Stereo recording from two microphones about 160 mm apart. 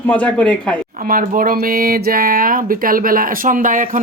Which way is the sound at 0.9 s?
60° right (ahead or behind).